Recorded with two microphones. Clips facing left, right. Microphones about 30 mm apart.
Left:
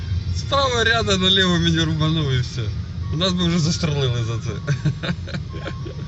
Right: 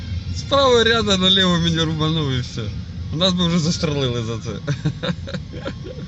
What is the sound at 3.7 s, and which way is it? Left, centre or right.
Speech, centre.